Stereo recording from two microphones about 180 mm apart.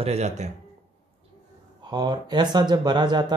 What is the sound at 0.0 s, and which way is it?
Speech, 35° right (ahead or behind).